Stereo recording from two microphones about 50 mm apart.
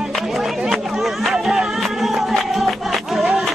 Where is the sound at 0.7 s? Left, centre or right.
Centre.